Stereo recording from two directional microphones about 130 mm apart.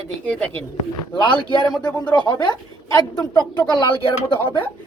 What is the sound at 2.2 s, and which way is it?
Speech, 35° left (ahead or behind).